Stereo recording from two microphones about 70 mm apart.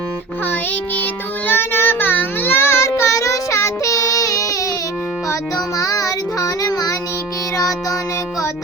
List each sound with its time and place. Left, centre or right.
1.5 s child singing: left
7.5 s music: left